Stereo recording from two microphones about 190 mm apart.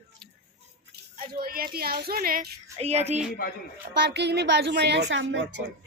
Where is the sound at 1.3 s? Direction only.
50° right (ahead or behind).